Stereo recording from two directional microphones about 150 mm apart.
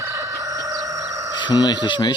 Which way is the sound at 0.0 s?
20° right (ahead or behind).